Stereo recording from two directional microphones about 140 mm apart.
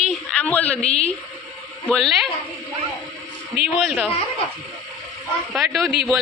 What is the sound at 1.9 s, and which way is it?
Speech, centre (ahead or behind).